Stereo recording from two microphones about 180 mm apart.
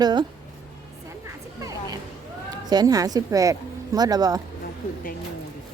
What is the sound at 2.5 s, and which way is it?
Speech, 20° right (ahead or behind).